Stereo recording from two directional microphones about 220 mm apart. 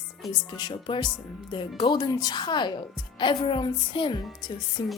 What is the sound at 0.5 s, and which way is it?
A woman's voice, 20° left (ahead or behind).